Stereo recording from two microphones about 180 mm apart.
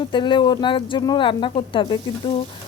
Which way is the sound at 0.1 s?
25° left (ahead or behind).